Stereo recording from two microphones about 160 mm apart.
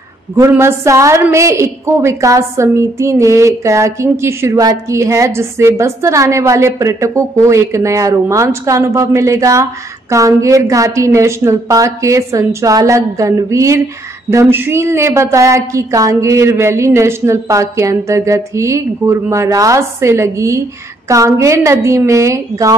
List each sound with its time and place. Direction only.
0.4 s a woman's voice: 15° right (ahead or behind)